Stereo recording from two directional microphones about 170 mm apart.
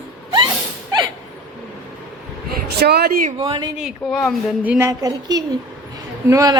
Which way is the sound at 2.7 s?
75° right (ahead or behind).